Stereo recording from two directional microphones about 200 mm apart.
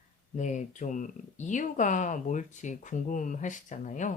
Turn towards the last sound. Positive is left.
turn(degrees=40)  # may be behind; listen again after turning